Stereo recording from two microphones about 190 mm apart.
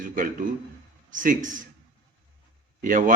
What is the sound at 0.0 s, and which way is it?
A man's voice, 45° right (ahead or behind).